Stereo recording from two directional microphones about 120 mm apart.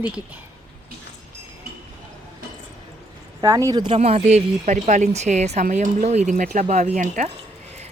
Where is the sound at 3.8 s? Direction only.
50° right (ahead or behind); by 7.3 s 80° right.